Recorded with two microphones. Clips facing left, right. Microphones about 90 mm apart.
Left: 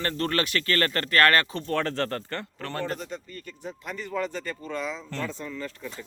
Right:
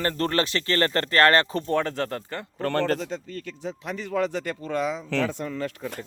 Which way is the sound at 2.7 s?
75° right (ahead or behind).